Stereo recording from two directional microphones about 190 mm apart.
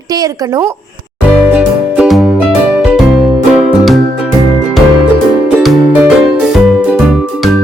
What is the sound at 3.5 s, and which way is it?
Music, 5° right (ahead or behind).